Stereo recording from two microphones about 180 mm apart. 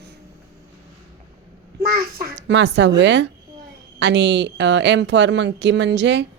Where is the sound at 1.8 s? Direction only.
65° right (ahead or behind).